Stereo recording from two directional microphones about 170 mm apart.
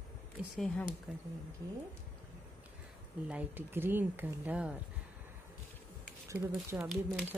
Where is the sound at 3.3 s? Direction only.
10° right (ahead or behind).